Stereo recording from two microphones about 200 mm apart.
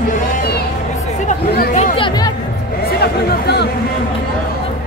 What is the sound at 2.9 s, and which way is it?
Chatter, 55° left (ahead or behind).